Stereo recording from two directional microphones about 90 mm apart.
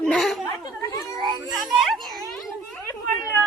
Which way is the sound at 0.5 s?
40° left (ahead or behind).